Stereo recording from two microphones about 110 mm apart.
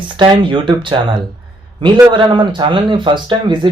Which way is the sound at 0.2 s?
45° right (ahead or behind).